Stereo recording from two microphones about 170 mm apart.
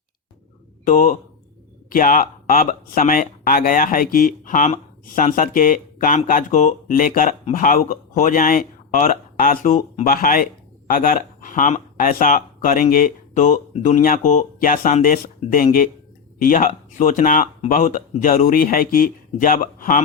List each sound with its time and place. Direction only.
0.9 s speech: 50° left (ahead or behind)